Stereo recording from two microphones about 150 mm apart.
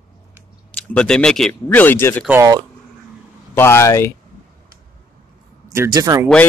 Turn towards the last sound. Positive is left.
turn(degrees=-25)  # may be behind; listen again after turning